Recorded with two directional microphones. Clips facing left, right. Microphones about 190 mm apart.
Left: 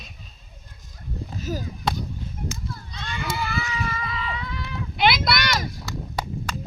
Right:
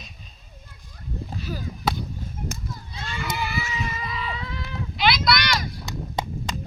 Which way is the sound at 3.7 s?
25° right (ahead or behind).